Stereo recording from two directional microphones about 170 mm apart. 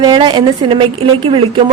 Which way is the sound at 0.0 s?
25° right (ahead or behind).